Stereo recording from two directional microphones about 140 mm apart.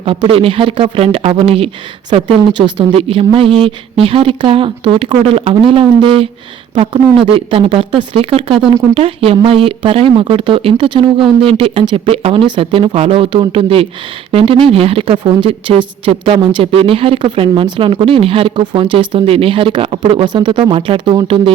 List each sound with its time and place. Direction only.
0.0 s speech: 40° right (ahead or behind)
7.3 s speech: 40° right (ahead or behind)